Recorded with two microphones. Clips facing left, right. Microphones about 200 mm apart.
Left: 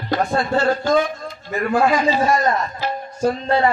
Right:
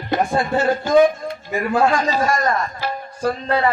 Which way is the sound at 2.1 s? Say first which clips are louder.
Left 2 dB; 20° left (ahead or behind).